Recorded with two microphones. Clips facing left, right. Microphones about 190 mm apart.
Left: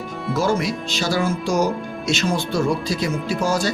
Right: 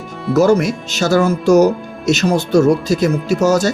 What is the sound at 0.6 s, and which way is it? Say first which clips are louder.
Speech: right 5 dB; 45° right (ahead or behind).